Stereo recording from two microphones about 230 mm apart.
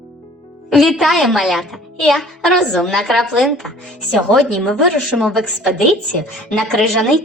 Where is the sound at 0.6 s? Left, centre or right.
Centre.